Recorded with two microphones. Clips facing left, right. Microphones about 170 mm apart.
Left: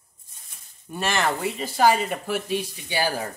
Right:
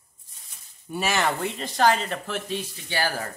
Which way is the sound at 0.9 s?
Centre (ahead or behind).